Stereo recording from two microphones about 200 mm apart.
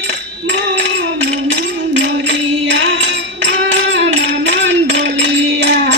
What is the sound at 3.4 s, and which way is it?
Music, 70° right (ahead or behind).